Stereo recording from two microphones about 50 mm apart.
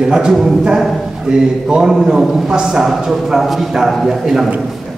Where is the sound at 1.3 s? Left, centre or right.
Centre.